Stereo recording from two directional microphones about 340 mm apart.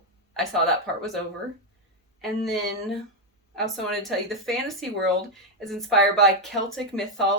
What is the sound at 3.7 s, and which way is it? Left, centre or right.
Speech, centre.